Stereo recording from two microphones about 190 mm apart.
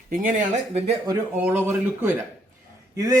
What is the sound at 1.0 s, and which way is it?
A man's voice, 10° right (ahead or behind).